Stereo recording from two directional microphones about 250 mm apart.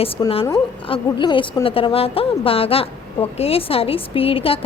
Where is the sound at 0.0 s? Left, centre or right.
Left.